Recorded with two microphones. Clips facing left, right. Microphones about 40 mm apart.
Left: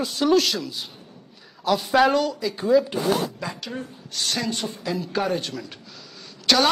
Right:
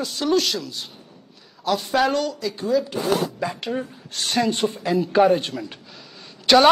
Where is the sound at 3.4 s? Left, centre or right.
Centre.